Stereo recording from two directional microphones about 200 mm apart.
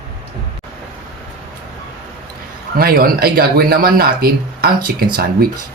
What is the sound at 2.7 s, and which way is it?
Speech, 45° right (ahead or behind).